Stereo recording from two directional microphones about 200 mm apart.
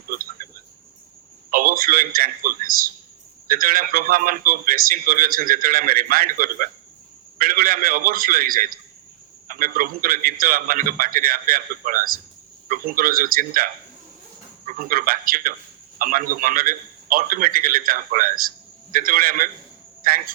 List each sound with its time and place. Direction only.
0.1 s a sound: 45° right (ahead or behind)
1.5 s a man's voice: 45° right (ahead or behind)
14.7 s a man's voice: 45° right (ahead or behind)